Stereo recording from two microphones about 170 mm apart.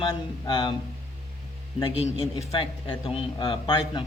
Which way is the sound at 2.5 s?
30° left (ahead or behind).